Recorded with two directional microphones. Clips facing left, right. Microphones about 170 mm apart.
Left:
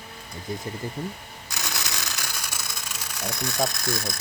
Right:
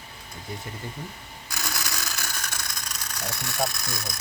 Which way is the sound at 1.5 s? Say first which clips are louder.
Even; 20° left (ahead or behind).